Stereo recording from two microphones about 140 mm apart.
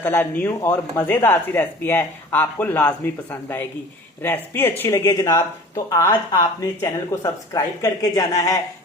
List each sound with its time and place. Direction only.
0.0 s speech: 15° left (ahead or behind)